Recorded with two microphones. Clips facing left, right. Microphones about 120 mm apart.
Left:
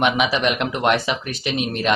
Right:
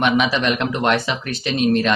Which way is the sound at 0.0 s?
15° left (ahead or behind).